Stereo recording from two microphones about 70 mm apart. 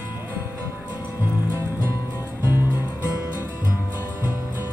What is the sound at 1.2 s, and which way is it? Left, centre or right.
Music, right.